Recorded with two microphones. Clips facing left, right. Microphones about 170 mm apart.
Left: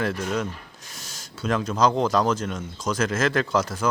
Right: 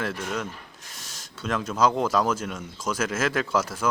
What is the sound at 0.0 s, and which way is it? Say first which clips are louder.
Speech: left 4 dB; centre (ahead or behind).